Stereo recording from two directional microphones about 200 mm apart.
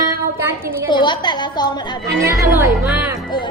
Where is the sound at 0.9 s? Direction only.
25° left (ahead or behind).